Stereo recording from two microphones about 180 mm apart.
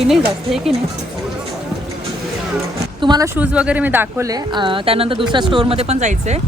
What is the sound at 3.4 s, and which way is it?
Speech, 5° right (ahead or behind).